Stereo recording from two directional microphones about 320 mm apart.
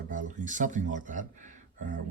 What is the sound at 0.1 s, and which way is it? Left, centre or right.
Speech, right.